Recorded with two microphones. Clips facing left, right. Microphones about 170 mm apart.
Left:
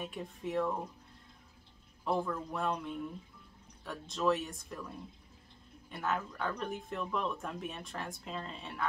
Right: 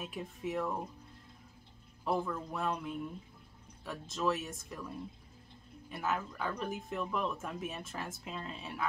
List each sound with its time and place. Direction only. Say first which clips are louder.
0.0 s speech: even; centre (ahead or behind)
2.0 s speech: even; centre (ahead or behind)